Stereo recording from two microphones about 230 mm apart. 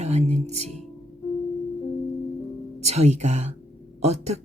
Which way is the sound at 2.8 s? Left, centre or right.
Right.